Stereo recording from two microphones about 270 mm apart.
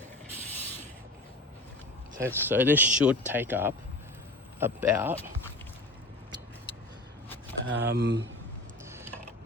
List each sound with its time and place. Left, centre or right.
2.1 s speech: centre
7.6 s speech: right
8.8 s a sound: centre